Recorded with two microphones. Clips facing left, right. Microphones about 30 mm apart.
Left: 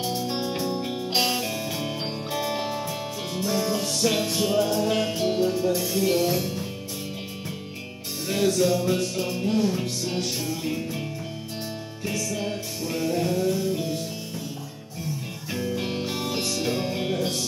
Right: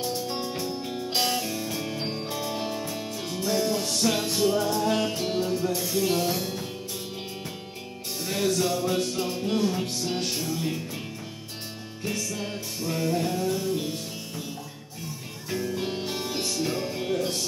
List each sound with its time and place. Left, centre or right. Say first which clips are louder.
0.1 s music: left 3 dB; centre
3.4 s music: even; centre
4.3 s music: left 1 dB; left
4.7 s music: left 1 dB; centre
8.3 s music: left 4 dB; centre
12.2 s music: left 3 dB; centre
15.5 s music: left 1 dB; centre
16.6 s music: left 2 dB; left